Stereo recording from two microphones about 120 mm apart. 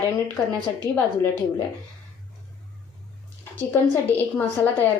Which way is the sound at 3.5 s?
15° left (ahead or behind).